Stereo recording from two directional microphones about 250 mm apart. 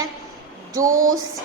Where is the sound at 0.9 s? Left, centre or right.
Right.